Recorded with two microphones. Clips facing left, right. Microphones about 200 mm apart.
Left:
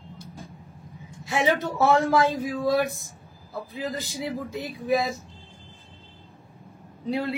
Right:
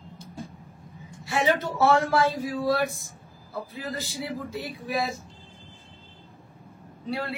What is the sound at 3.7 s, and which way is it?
A man's voice, 15° left (ahead or behind).